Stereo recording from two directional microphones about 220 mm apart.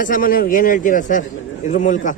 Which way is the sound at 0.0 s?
40° left (ahead or behind).